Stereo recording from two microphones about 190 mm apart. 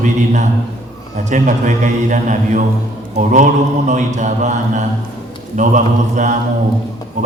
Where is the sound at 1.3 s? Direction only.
40° right (ahead or behind).